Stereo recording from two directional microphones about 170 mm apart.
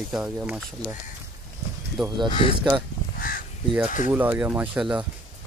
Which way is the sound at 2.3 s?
30° left (ahead or behind).